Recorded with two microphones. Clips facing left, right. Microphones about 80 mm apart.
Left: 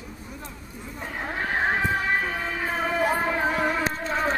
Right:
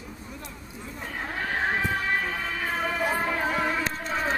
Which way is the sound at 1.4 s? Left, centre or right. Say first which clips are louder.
Left 3 dB; left.